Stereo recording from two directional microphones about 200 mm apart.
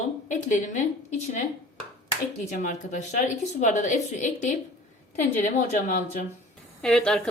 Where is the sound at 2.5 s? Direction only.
40° left (ahead or behind).